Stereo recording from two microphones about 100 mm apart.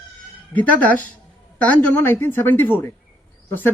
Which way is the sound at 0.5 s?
15° left (ahead or behind).